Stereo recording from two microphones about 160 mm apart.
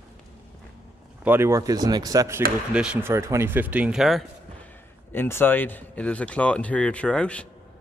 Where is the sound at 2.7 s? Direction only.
5° right (ahead or behind).